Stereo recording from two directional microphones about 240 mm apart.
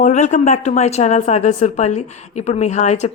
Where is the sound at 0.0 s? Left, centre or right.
Left.